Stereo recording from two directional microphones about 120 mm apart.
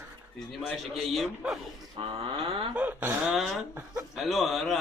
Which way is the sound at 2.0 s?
50° right (ahead or behind).